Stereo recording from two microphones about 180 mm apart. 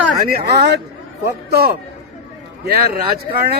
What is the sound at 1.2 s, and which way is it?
Speech, 60° right (ahead or behind).